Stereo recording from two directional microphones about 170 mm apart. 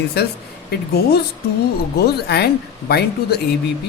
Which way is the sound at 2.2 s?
75° left (ahead or behind).